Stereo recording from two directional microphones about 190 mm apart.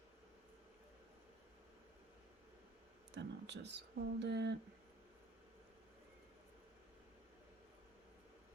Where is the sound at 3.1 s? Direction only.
65° right (ahead or behind).